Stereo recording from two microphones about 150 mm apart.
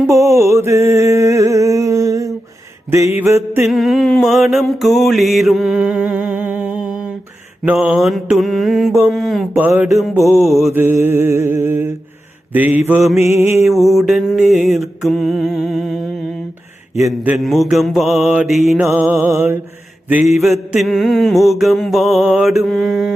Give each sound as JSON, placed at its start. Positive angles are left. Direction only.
{"t": 0.1, "sound": "a sound", "side_deg": -20}
{"t": 3.2, "sound": "mantra", "side_deg": -15}
{"t": 3.7, "sound": "mantra", "side_deg": 0}
{"t": 9.5, "sound": "mantra", "side_deg": -10}
{"t": 10.3, "sound": "mantra", "side_deg": 0}
{"t": 10.8, "sound": "mantra", "side_deg": -15}
{"t": 13.7, "sound": "mantra", "side_deg": 0}
{"t": 17.1, "sound": "mantra", "side_deg": 0}